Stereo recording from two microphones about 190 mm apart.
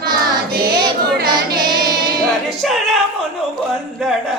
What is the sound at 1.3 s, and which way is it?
Child singing, 20° right (ahead or behind).